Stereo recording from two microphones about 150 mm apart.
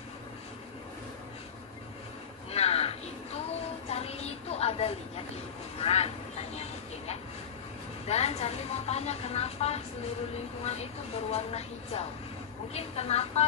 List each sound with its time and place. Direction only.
2.5 s a sound: 45° left (ahead or behind)
3.9 s vehicle: 45° left (ahead or behind)
8.1 s speech: 45° left (ahead or behind)
11.3 s speech: 45° left (ahead or behind)